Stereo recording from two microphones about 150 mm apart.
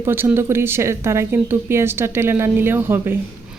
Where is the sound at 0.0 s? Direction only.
15° right (ahead or behind).